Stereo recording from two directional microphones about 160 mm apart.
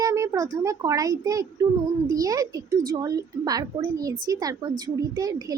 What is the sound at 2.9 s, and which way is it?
A woman's voice, 25° right (ahead or behind).